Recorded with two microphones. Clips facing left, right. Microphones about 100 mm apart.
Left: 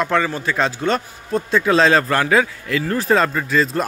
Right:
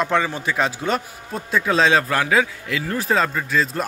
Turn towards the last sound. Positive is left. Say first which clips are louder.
# left 3 dB
turn(degrees=0)  # may be behind; listen again after turning